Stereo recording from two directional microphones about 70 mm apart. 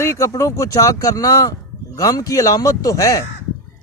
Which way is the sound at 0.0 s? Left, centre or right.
Left.